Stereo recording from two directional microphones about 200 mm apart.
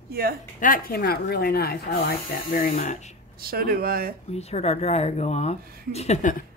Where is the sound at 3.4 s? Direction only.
50° right (ahead or behind).